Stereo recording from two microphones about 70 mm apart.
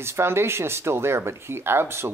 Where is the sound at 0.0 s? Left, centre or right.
Right.